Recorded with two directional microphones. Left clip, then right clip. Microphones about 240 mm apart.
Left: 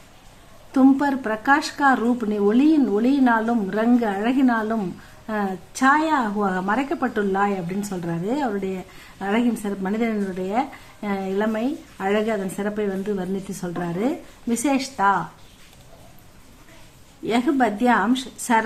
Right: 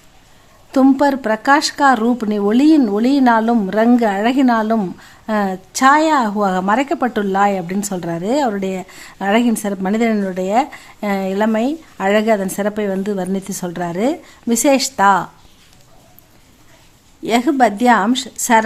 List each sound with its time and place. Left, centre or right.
0.7 s a woman's voice: right
17.2 s a woman's voice: right